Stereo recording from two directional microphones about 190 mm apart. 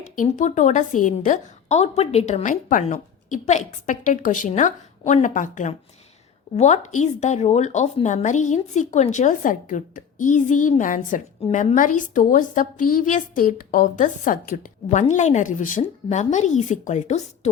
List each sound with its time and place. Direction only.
0.2 s a woman's voice: 40° left (ahead or behind)